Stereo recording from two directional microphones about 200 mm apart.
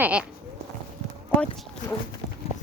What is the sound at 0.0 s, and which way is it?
Speech, 5° right (ahead or behind).